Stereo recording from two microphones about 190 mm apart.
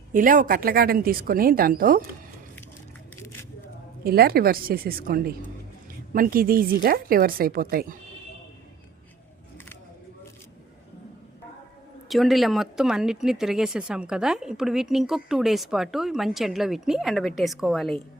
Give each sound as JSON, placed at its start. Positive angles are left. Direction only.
{"t": 0.1, "sound": "a woman's voice", "side_deg": -45}
{"t": 4.0, "sound": "a woman's voice", "side_deg": -55}
{"t": 12.0, "sound": "speech", "side_deg": 0}